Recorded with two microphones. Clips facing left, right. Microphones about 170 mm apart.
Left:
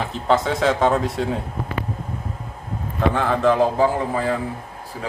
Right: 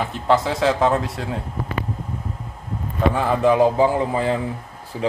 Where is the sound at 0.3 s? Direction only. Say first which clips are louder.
Even; centre (ahead or behind).